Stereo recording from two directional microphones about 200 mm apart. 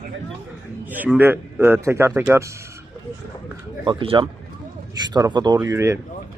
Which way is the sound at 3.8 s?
25° right (ahead or behind).